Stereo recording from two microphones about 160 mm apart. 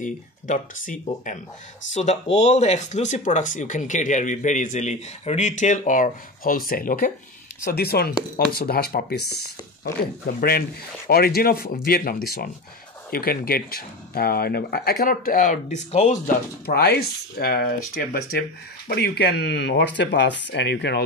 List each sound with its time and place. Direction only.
0.0 s speech: 55° left (ahead or behind)
2.0 s speech: 45° left (ahead or behind); by 7.1 s 60° left (ahead or behind)
7.6 s speech: 75° left (ahead or behind)
10.2 s speech: 75° left (ahead or behind); by 16.3 s 45° left (ahead or behind)
16.6 s speech: 75° left (ahead or behind)
18.9 s speech: 80° left